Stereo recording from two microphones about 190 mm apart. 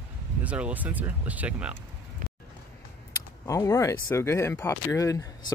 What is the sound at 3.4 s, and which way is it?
Speech, 15° left (ahead or behind).